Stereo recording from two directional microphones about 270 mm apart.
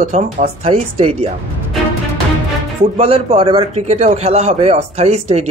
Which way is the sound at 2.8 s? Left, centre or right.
Right.